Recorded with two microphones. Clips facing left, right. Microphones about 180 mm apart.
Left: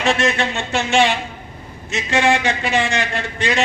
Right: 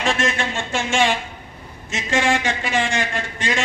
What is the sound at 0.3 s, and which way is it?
A man's voice, 45° right (ahead or behind).